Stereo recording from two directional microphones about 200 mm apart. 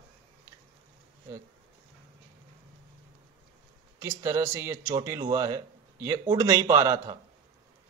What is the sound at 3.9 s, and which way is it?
Speech, 15° right (ahead or behind).